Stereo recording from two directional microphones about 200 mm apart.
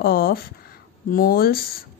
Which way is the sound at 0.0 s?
50° left (ahead or behind).